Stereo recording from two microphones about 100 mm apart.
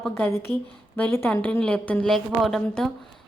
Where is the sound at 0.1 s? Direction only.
25° left (ahead or behind).